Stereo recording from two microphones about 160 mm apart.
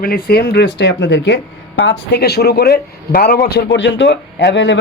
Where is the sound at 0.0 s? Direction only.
75° left (ahead or behind).